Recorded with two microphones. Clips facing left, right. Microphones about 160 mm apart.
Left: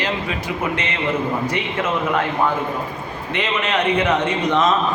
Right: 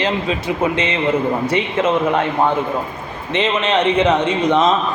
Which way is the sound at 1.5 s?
20° right (ahead or behind).